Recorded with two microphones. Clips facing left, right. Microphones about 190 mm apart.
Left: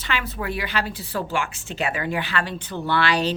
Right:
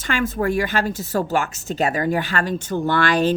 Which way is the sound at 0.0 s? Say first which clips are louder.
Right 7 dB; 45° right (ahead or behind).